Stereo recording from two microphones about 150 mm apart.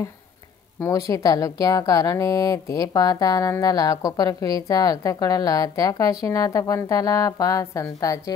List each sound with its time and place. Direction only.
0.7 s a woman's voice: 20° left (ahead or behind)